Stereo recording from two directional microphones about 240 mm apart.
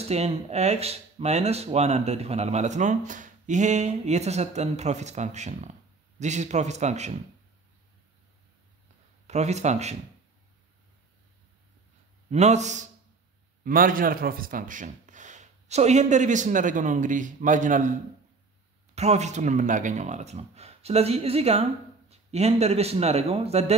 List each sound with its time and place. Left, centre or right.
0.1 s speech: right
9.3 s speech: right
12.3 s a man's voice: right
18.9 s speech: right